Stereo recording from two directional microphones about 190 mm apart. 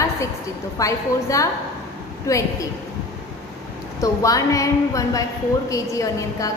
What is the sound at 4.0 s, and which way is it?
A woman's voice, 15° left (ahead or behind).